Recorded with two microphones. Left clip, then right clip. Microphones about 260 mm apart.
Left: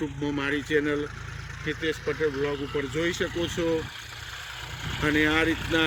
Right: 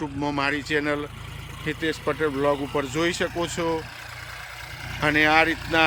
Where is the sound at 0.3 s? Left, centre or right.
Centre.